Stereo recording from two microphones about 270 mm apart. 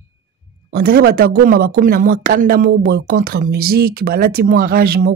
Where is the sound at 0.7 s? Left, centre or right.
Right.